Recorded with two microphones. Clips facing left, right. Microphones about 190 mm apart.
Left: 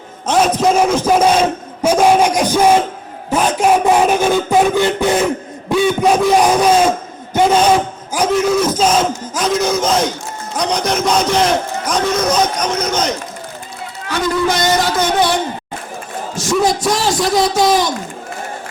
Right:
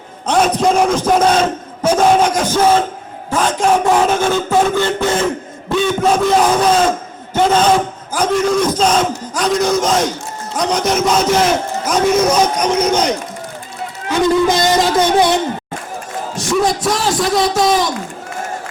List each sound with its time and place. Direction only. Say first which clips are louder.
0.3 s a sound: even; 5° left (ahead or behind)
3.2 s music: left 1 dB; 15° left (ahead or behind)
5.6 s a sound: left 1 dB; 15° left (ahead or behind)
10.5 s a man's voice: right 1 dB; centre (ahead or behind)
14.1 s music: right 4 dB; 25° right (ahead or behind)
16.3 s a man's voice: left 1 dB; centre (ahead or behind)